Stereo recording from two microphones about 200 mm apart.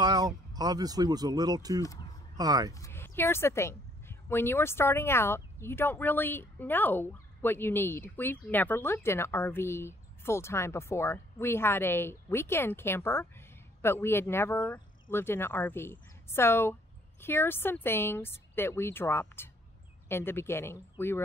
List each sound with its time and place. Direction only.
0.0 s speech: 20° right (ahead or behind)
1.8 s a woman's voice: 15° left (ahead or behind)
2.3 s speech: 20° right (ahead or behind)
2.7 s a woman's voice: 15° left (ahead or behind)